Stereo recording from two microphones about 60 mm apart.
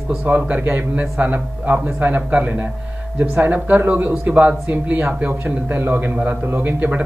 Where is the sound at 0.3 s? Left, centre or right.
Right.